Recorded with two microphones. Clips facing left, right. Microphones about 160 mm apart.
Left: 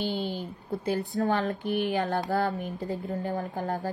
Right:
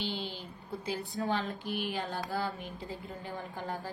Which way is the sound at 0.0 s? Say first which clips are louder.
Left 7 dB; 45° left (ahead or behind).